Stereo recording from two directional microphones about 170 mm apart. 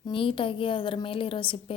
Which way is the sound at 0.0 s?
30° left (ahead or behind).